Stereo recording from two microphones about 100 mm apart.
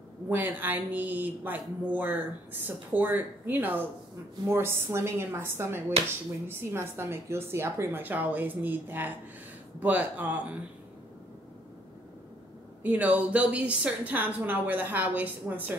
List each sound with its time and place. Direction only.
0.3 s a woman's voice: 20° right (ahead or behind)
12.8 s a woman's voice: 15° right (ahead or behind)